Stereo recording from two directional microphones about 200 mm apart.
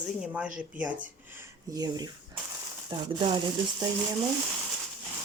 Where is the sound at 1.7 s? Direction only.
20° right (ahead or behind).